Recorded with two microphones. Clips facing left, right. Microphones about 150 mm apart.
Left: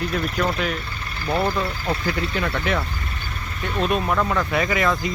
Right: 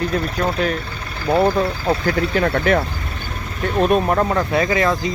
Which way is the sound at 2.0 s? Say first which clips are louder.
Right 7 dB; 55° right (ahead or behind).